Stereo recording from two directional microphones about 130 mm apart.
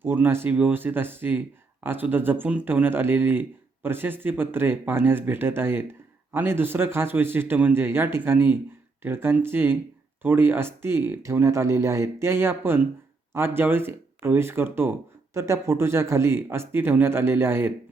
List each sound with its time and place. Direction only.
0.0 s speech: 15° right (ahead or behind)